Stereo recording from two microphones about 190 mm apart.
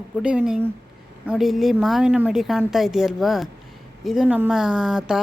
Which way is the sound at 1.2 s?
Centre (ahead or behind).